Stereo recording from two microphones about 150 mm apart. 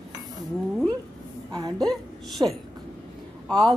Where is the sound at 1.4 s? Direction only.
25° right (ahead or behind).